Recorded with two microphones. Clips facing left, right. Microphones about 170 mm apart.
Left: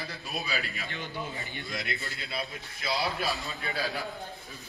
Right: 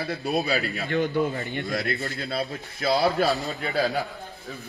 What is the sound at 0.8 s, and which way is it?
A man's voice, 60° right (ahead or behind).